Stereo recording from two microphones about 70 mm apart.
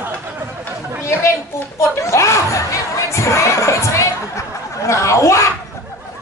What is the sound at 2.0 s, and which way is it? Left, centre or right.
Speech, left.